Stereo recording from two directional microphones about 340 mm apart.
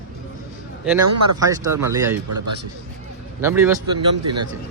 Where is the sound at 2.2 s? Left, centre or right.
Right.